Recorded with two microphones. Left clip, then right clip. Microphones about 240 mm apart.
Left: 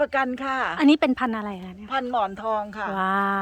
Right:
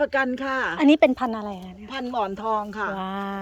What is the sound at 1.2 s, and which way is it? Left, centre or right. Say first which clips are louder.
Speech: even; centre.